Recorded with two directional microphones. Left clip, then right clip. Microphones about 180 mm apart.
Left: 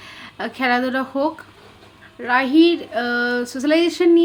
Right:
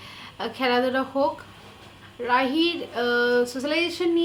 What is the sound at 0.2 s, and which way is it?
A woman's voice, 30° left (ahead or behind).